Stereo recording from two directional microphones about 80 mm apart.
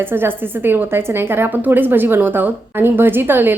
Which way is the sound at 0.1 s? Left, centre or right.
Right.